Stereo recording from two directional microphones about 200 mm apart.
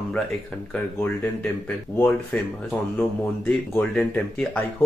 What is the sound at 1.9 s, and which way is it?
Speech, 10° left (ahead or behind).